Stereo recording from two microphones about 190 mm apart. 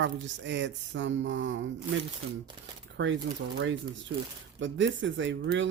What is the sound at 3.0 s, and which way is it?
Speech, 80° right.